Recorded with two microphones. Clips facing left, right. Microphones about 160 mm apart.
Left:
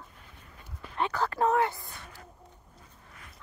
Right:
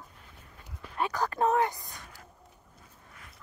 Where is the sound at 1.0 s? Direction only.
15° right (ahead or behind).